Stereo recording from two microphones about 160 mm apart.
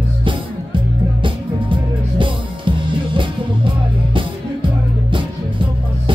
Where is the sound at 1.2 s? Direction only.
30° right (ahead or behind).